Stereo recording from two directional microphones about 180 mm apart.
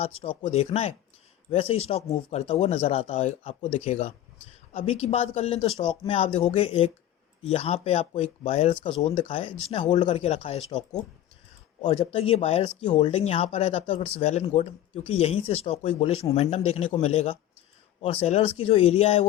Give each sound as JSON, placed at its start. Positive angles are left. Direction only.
{"t": 0.0, "sound": "speech", "side_deg": 35}
{"t": 11.8, "sound": "speech", "side_deg": 35}